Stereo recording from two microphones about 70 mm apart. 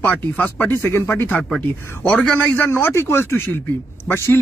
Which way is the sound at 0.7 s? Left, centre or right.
Left.